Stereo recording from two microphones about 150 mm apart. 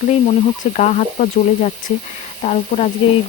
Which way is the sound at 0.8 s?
55° left (ahead or behind).